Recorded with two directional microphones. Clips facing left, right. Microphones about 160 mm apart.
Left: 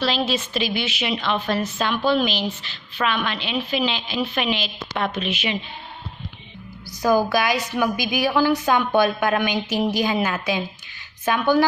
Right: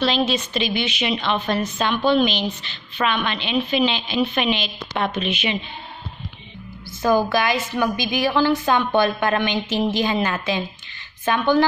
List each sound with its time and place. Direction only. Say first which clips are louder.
0.0 s a woman's voice: right 2 dB; 5° left (ahead or behind)
7.1 s a woman's voice: even; centre (ahead or behind)
7.3 s a woman's voice: even; 15° left (ahead or behind)